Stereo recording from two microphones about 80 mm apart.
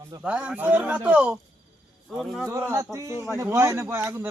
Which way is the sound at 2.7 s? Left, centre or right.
Right.